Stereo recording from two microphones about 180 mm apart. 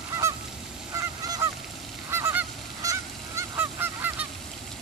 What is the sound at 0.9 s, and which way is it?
Goose, 15° right (ahead or behind).